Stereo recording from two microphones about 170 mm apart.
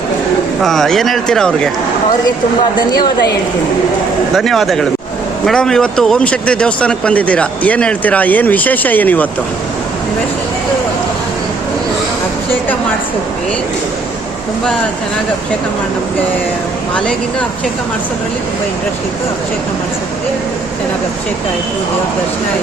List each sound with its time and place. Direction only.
0.6 s speech: centre (ahead or behind)
2.7 s a woman's voice: 25° left (ahead or behind)
4.4 s speech: centre (ahead or behind)